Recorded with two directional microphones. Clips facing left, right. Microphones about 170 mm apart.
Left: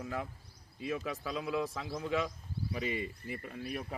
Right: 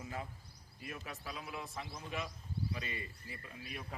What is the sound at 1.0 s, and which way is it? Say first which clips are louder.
A man's voice: left 9 dB; 90° left.